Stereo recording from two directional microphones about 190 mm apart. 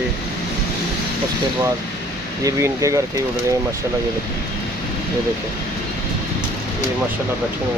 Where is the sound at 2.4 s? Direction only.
15° right (ahead or behind).